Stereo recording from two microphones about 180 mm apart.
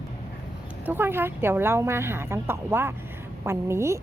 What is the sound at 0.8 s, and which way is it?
A woman's voice, 10° right (ahead or behind).